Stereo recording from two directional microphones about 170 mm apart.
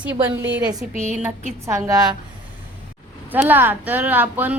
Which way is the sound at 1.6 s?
20° right (ahead or behind).